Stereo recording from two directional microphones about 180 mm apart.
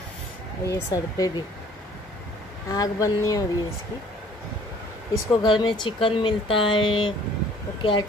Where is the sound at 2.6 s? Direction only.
20° left (ahead or behind).